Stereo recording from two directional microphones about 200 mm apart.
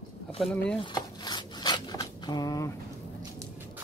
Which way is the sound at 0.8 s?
20° left (ahead or behind).